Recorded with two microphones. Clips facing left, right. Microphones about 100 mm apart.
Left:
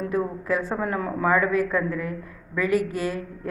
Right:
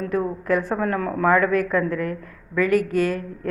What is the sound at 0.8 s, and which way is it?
Speech, 15° left (ahead or behind).